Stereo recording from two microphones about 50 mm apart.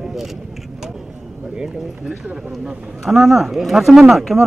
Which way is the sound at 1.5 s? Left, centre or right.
Centre.